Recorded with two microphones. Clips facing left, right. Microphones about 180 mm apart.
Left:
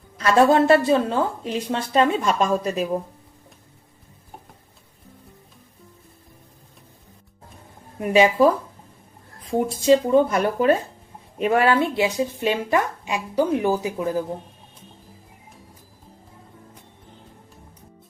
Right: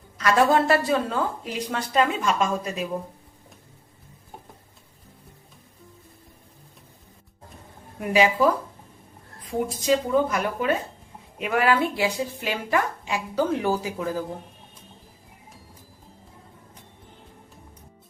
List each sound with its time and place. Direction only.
0.2 s a woman's voice: 30° left (ahead or behind)
7.9 s a woman's voice: 25° left (ahead or behind)
9.5 s a woman's voice: 30° left (ahead or behind)